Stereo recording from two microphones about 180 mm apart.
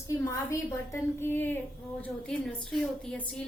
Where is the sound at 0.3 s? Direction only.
15° left (ahead or behind).